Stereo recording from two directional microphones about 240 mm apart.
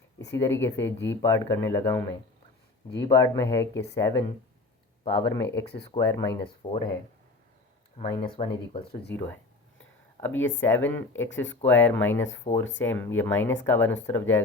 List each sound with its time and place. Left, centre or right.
0.3 s speech: centre
0.9 s speech: left
1.2 s speech: centre
3.1 s speech: centre
6.6 s speech: left
7.9 s speech: left
9.1 s speech: centre
12.5 s speech: left
12.8 s speech: centre